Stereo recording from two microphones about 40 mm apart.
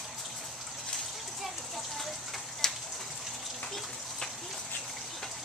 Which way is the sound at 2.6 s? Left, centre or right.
Centre.